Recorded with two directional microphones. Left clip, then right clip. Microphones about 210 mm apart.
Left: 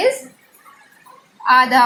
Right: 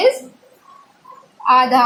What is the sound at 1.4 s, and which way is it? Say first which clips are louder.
Speech: even; 5° right (ahead or behind).